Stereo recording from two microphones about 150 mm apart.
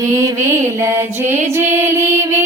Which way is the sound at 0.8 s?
15° right (ahead or behind).